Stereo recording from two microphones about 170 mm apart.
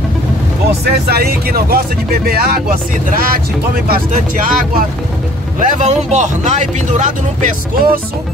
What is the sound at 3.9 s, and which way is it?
Speech, 50° right (ahead or behind).